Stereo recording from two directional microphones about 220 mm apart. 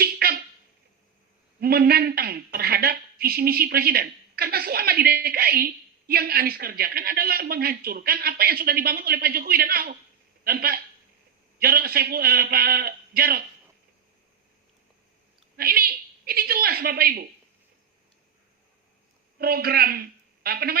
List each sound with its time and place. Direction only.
0.0 s a sound: 45° right (ahead or behind)
1.6 s a woman's voice: 45° right (ahead or behind)
15.5 s a woman's voice: 45° right (ahead or behind)
19.4 s a woman's voice: 45° right (ahead or behind)